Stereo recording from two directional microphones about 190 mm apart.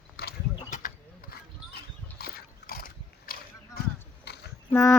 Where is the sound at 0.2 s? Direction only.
55° left (ahead or behind).